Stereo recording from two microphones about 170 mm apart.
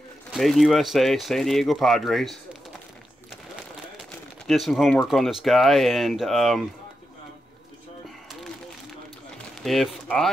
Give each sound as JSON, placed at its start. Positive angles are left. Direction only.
{"t": 0.3, "sound": "speech", "side_deg": 0}
{"t": 4.5, "sound": "speech", "side_deg": 0}
{"t": 9.6, "sound": "speech", "side_deg": 0}